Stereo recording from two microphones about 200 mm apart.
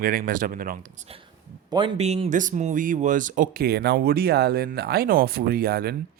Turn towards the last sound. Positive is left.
turn(degrees=-50)  # may be behind; listen again after turning